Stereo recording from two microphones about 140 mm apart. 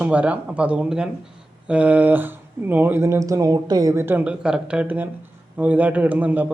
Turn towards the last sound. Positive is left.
turn(degrees=-10)  # may be behind; listen again after turning